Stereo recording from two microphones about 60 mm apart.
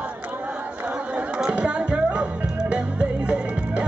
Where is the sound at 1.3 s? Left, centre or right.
Centre.